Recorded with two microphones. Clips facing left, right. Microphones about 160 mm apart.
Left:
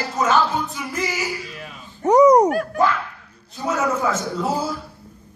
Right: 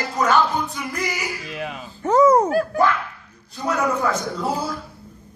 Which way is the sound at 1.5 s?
90° right.